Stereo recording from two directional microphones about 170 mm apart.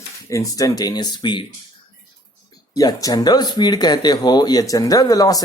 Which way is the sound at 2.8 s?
20° left (ahead or behind).